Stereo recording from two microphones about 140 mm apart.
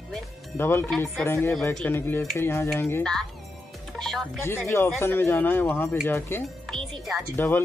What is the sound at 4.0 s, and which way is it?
Music, centre (ahead or behind).